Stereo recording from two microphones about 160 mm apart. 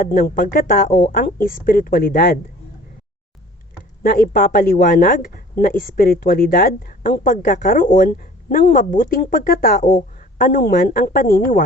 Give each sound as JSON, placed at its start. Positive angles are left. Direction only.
{"t": 0.0, "sound": "speech", "side_deg": 60}
{"t": 4.0, "sound": "speech", "side_deg": 65}